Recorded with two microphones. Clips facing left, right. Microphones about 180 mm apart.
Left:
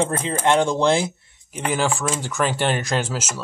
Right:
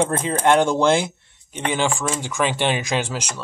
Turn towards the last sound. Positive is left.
turn(degrees=5)  # may be behind; listen again after turning